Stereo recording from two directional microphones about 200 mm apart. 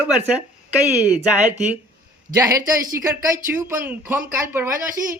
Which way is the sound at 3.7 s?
10° right (ahead or behind).